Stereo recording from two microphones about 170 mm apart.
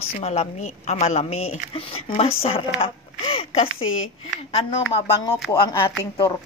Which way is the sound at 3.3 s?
35° left (ahead or behind).